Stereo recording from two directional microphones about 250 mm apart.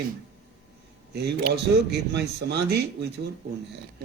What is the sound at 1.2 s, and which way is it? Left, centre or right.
A woman's voice, right.